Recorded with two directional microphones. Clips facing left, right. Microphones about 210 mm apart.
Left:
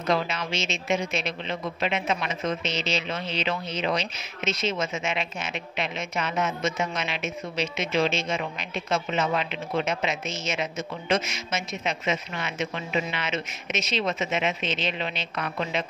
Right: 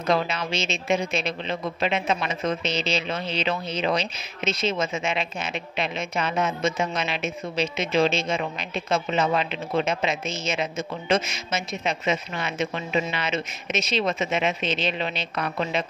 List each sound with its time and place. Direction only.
0.1 s a man's voice: 35° right (ahead or behind)